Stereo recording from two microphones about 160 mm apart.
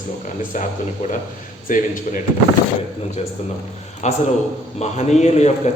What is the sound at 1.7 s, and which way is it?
Speech, 55° left (ahead or behind).